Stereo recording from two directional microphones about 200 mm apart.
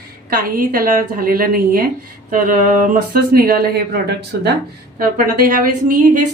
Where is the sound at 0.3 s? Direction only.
45° right (ahead or behind).